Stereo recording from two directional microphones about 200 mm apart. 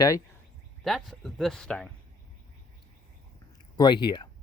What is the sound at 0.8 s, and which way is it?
Speech, centre (ahead or behind).